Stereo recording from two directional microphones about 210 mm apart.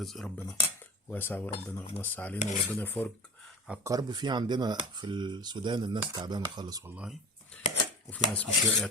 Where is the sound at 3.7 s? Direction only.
15° right (ahead or behind).